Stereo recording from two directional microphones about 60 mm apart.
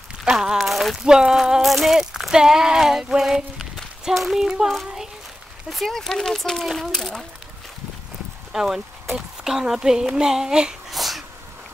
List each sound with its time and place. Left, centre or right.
0.2 s a sound: centre
1.0 s speech: centre
8.5 s speech: centre
11.0 s sneeze: centre